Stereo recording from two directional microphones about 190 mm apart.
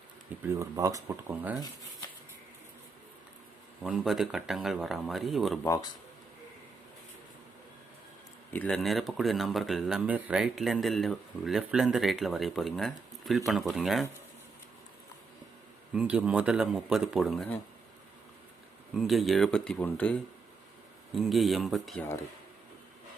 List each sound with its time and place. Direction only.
0.4 s speech: 15° right (ahead or behind)
3.8 s speech: centre (ahead or behind)
5.6 s speech: 15° left (ahead or behind)
8.5 s speech: 5° left (ahead or behind)
16.0 s speech: 5° right (ahead or behind)
18.9 s speech: centre (ahead or behind)